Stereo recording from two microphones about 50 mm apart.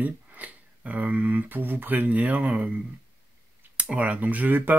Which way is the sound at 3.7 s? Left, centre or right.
Right.